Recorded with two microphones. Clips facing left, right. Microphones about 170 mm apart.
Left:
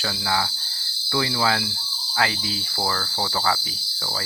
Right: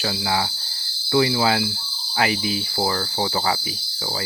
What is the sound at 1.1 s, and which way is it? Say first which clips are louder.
Speech: right 5 dB; 20° right (ahead or behind).